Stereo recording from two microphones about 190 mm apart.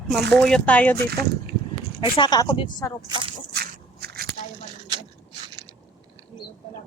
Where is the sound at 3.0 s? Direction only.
25° right (ahead or behind).